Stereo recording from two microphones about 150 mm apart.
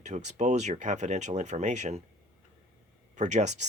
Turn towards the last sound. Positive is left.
turn(degrees=-50)  # may be behind; listen again after turning